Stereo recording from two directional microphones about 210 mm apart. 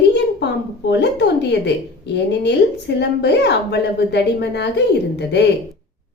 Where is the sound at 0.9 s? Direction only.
55° left (ahead or behind).